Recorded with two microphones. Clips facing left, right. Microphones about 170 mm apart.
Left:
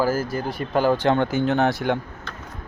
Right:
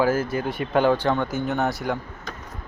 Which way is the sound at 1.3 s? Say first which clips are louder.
Left 4 dB; 90° left.